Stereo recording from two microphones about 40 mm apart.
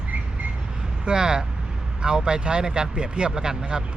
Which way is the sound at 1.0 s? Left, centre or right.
Centre.